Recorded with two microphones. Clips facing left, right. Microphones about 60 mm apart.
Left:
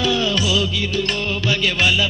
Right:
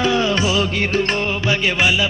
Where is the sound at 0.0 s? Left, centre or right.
Right.